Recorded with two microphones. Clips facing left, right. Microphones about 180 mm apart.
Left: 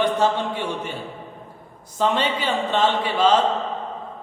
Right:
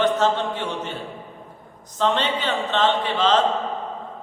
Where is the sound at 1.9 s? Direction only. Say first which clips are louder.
Even; 10° left (ahead or behind).